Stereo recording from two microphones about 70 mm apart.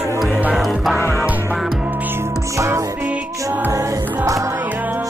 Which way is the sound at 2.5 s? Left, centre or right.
Right.